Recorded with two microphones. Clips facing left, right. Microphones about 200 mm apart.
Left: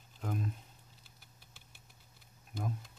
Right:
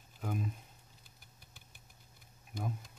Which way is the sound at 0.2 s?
5° right (ahead or behind).